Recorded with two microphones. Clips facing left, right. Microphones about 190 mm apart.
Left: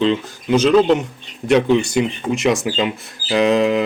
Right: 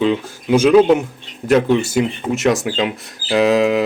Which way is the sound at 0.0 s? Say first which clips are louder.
Even; 10° right (ahead or behind).